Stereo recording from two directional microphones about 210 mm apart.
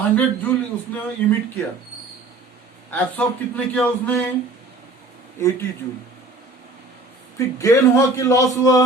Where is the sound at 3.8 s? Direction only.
10° left (ahead or behind).